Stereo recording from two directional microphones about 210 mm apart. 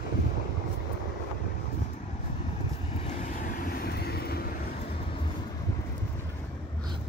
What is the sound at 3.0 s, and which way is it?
Vehicle, 40° left (ahead or behind).